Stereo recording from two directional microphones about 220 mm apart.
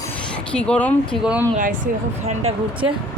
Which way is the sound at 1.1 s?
5° right (ahead or behind).